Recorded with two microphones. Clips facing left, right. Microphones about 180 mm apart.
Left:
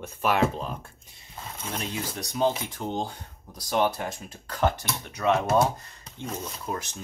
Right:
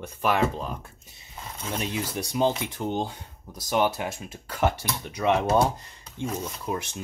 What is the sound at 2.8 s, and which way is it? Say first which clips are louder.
Speech: right 2 dB; 5° right (ahead or behind).